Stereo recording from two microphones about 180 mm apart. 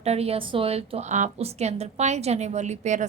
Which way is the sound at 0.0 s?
35° right (ahead or behind).